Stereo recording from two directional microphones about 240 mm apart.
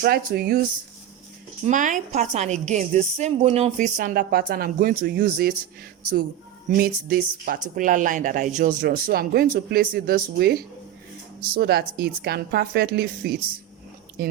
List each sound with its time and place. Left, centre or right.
0.0 s a woman's voice: right
1.6 s a woman's voice: right
6.7 s a woman's voice: right